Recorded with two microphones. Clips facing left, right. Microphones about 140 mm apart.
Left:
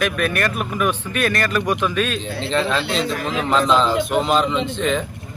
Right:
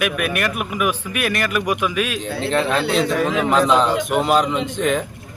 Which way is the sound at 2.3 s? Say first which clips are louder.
Right 3 dB; 55° right (ahead or behind).